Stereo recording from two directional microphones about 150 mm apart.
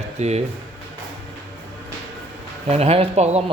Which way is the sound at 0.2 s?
45° right (ahead or behind).